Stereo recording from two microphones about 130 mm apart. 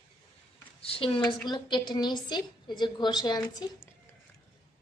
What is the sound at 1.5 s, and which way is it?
A woman's voice, 35° left (ahead or behind).